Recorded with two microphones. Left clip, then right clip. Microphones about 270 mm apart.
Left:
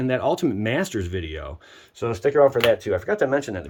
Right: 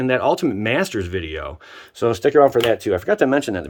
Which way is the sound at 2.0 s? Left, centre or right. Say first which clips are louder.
Right 4 dB; right.